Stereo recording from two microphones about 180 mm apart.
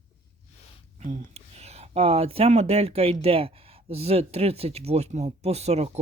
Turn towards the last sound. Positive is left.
turn(degrees=-35)  # may be behind; listen again after turning